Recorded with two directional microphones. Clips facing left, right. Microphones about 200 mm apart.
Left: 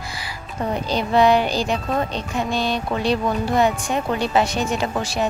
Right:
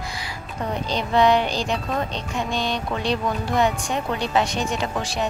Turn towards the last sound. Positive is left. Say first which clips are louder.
# left 3 dB
turn(degrees=5)  # may be behind; listen again after turning